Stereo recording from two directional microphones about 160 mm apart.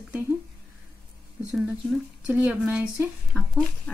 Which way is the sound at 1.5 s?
Centre (ahead or behind).